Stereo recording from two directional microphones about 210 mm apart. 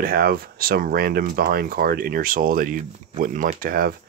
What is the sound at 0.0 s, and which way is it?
Speech, 45° right (ahead or behind).